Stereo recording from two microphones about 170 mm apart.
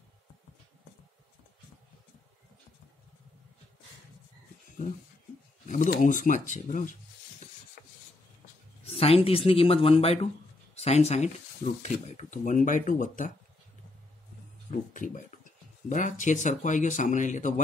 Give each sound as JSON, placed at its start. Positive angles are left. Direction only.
{"t": 5.7, "sound": "speech", "side_deg": 50}
{"t": 7.8, "sound": "rub", "side_deg": 55}
{"t": 8.8, "sound": "speech", "side_deg": 35}
{"t": 14.7, "sound": "speech", "side_deg": 50}